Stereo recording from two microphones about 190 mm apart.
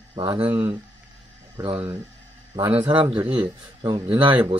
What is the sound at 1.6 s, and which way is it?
Speech, 25° right (ahead or behind).